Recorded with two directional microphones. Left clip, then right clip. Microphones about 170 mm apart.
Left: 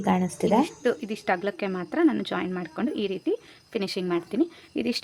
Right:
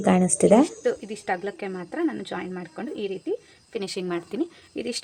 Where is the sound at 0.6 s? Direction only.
25° left (ahead or behind).